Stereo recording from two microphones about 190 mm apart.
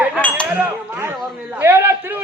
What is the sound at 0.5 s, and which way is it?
A man's voice, 10° right (ahead or behind).